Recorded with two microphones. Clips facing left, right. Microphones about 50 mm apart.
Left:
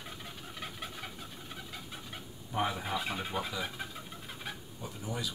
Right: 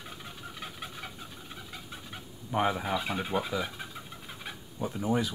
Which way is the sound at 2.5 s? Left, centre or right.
Right.